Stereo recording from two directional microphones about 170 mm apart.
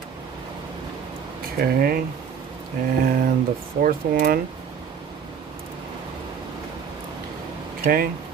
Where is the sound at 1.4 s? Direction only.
60° right (ahead or behind).